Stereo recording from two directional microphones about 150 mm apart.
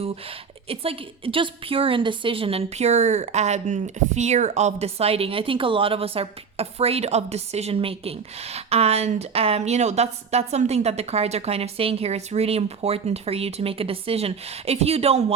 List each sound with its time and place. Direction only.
0.7 s a woman's voice: 40° right (ahead or behind)